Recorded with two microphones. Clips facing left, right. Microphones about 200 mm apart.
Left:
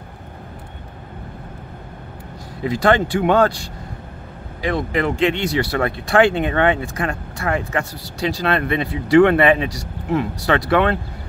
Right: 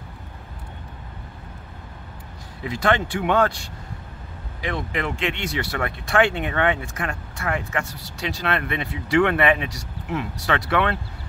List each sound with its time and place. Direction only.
2.6 s speech: 35° left (ahead or behind)